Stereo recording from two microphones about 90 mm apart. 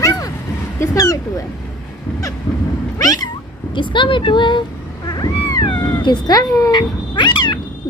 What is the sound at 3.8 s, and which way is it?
Speech, 65° left (ahead or behind).